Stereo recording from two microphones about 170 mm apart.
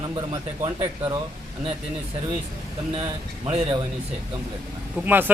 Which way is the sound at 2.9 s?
35° right (ahead or behind).